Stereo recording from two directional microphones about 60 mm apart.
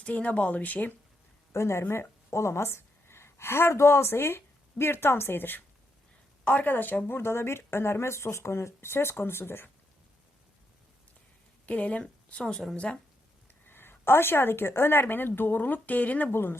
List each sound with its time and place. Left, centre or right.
0.0 s speech: left
1.5 s a woman's voice: left
11.6 s speech: left
13.7 s speech: left
16.3 s speech: left